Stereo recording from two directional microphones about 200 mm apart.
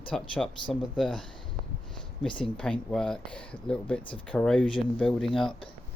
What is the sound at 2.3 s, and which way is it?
Speech, 5° left (ahead or behind).